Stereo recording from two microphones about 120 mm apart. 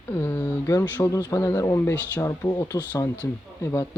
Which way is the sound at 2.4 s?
30° left (ahead or behind).